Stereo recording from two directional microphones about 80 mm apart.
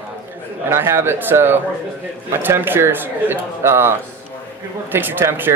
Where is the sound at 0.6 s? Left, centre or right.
Right.